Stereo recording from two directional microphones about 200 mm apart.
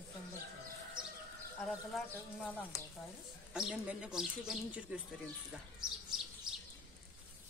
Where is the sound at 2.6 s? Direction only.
15° left (ahead or behind).